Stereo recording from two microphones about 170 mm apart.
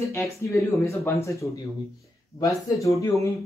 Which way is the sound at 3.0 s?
20° left (ahead or behind).